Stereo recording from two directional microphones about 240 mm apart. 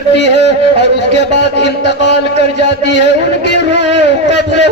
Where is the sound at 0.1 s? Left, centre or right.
Left.